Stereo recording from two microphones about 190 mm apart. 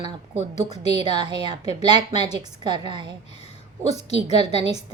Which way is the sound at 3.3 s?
35° left (ahead or behind).